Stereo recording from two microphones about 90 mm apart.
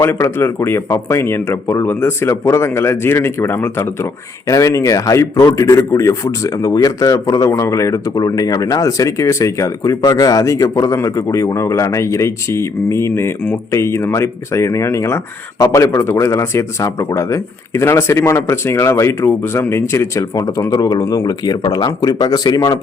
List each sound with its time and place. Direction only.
0.0 s speech: 25° left (ahead or behind); by 22.8 s 50° left (ahead or behind)